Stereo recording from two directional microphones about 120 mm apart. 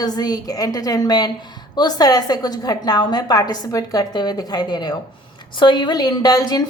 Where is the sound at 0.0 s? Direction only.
35° left (ahead or behind).